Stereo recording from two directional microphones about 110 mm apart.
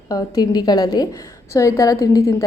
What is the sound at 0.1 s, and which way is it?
A woman's voice, 35° left (ahead or behind).